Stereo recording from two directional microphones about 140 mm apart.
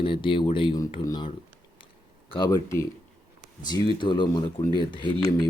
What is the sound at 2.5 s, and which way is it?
Speech, 20° left (ahead or behind).